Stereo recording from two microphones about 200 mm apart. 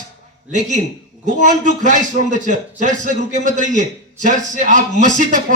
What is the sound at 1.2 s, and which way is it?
A man's voice, 40° right (ahead or behind).